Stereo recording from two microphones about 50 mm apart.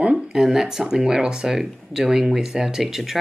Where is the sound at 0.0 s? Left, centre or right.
Centre.